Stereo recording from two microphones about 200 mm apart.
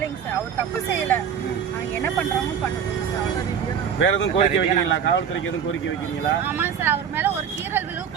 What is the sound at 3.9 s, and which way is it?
Speech, 70° left (ahead or behind).